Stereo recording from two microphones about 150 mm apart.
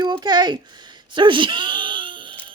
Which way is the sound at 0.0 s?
30° right (ahead or behind).